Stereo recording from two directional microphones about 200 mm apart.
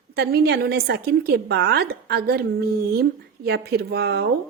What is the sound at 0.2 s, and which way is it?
A woman's voice, 55° right (ahead or behind).